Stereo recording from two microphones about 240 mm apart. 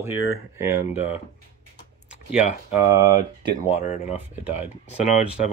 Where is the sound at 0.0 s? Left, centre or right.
Centre.